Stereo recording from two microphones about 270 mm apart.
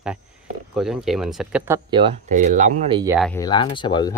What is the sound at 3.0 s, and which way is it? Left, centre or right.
Speech, centre.